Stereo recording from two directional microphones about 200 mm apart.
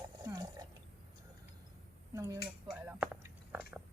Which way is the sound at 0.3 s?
20° right (ahead or behind).